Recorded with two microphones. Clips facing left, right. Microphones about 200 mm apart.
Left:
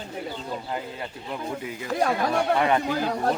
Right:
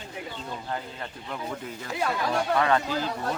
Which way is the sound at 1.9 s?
45° left (ahead or behind).